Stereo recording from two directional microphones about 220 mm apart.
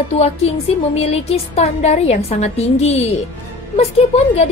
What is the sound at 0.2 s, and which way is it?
Speech, 30° left (ahead or behind).